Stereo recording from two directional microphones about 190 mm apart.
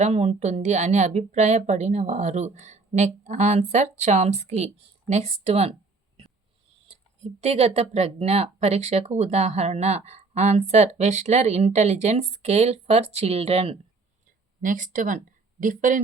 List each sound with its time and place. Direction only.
0.0 s speech: 35° right (ahead or behind)
6.8 s speech: 30° right (ahead or behind)
14.6 s speech: 40° right (ahead or behind)